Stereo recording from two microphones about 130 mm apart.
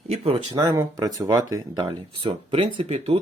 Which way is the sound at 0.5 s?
30° right (ahead or behind).